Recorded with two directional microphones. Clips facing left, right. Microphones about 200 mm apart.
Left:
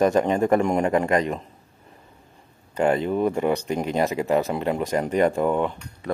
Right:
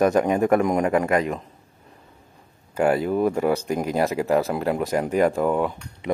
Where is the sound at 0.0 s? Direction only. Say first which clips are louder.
Right 1 dB; 10° right (ahead or behind).